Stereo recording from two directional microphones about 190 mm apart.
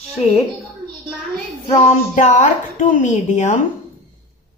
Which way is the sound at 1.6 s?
35° left (ahead or behind).